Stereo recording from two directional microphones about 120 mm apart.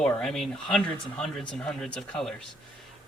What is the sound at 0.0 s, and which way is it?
Speech, 5° left (ahead or behind).